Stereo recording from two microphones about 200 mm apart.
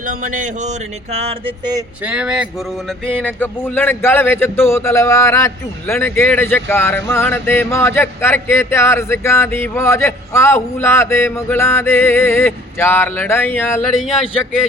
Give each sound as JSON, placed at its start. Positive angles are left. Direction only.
{"t": 0.0, "sound": "a sound", "side_deg": -40}
{"t": 2.0, "sound": "speech", "side_deg": -5}
{"t": 3.1, "sound": "speech", "side_deg": 10}